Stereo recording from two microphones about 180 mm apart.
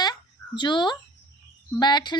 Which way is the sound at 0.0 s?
25° left (ahead or behind).